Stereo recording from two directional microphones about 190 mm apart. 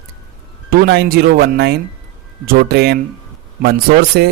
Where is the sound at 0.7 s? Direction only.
55° right (ahead or behind).